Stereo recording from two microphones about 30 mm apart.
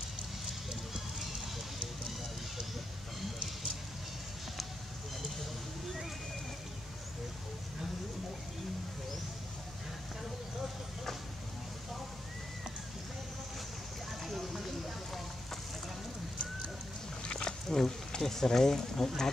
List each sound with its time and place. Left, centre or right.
0.7 s music: centre
14.2 s music: centre
17.2 s a sound: left
17.6 s wild animals: centre
18.2 s speech: centre